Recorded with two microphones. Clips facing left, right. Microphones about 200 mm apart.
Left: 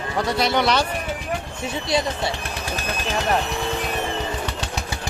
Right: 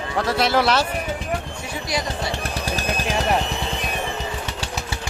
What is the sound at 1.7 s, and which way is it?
Speech, 25° left (ahead or behind).